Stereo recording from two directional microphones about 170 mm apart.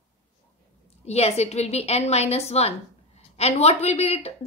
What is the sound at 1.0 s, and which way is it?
A woman's voice, 40° left (ahead or behind).